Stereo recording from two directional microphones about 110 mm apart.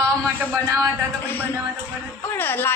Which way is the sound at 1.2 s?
20° left (ahead or behind).